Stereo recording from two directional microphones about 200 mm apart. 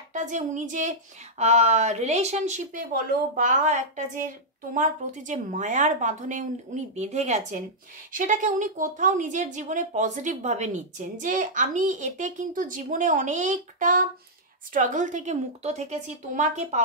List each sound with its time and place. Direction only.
0.1 s a woman's voice: 40° right (ahead or behind)